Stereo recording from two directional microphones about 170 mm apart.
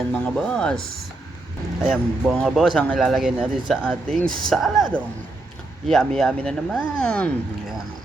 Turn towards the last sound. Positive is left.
turn(degrees=5)  # may be behind; listen again after turning